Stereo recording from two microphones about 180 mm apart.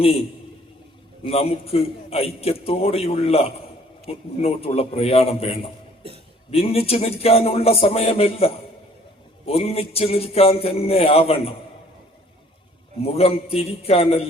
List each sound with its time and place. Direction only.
1.2 s a man's voice: 35° left (ahead or behind)
13.0 s a man's voice: 35° left (ahead or behind)